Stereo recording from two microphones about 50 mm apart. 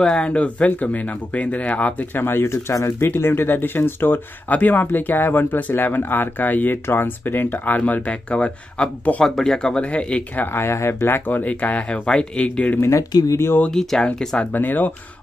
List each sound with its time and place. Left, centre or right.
0.0 s speech: left
2.1 s speech: left
3.1 s speech: left
9.2 s speech: centre; by 10.2 s left
10.3 s speech: left
10.6 s speech: left
11.2 s speech: left
12.7 s speech: left
13.7 s speech: centre
14.4 s speech: left